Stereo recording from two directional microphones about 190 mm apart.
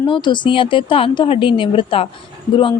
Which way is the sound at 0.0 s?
25° left (ahead or behind).